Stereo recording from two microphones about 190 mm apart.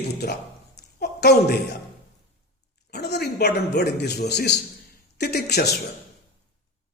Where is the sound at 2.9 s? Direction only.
60° left (ahead or behind).